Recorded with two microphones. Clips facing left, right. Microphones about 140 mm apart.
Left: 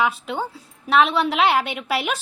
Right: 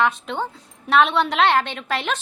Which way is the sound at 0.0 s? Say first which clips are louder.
Right 1 dB; 5° left (ahead or behind).